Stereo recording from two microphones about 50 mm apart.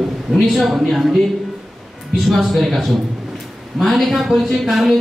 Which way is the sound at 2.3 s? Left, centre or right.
Centre.